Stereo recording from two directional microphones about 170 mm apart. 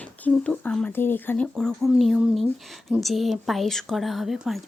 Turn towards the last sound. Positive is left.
turn(degrees=0)  # may be behind; listen again after turning